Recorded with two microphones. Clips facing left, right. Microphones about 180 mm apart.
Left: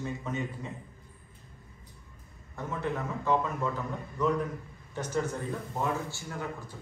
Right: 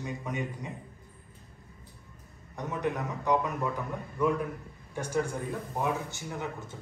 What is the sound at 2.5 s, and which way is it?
A man's voice, 15° right (ahead or behind).